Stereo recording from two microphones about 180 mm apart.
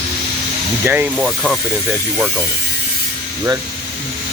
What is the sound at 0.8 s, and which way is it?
Speech, 10° right (ahead or behind).